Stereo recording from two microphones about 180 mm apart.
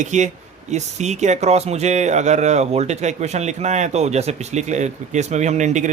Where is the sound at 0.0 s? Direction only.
40° right (ahead or behind).